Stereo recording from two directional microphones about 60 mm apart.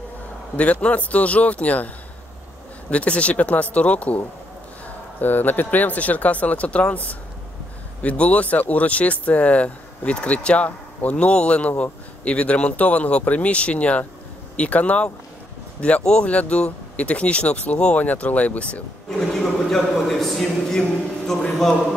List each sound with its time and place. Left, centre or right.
0.6 s speech: left
2.9 s speech: left
5.2 s speech: left
19.0 s a man's voice: centre